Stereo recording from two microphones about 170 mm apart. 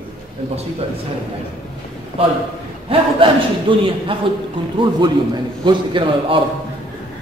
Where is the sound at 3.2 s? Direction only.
30° right (ahead or behind).